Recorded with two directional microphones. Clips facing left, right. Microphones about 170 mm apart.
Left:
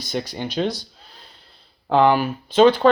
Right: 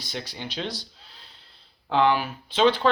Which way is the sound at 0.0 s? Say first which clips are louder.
Left 8 dB; 45° left (ahead or behind).